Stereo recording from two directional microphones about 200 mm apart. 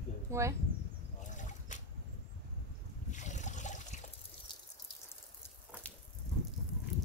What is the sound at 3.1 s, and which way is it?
Liquid, 35° left (ahead or behind).